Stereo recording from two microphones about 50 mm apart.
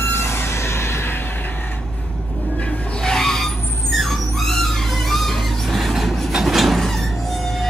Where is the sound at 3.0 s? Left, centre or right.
Centre.